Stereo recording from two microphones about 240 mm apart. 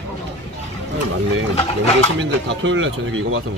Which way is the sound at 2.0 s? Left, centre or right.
Right.